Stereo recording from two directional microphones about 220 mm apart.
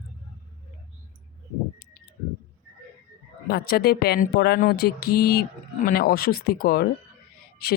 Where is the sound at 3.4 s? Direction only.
45° left (ahead or behind).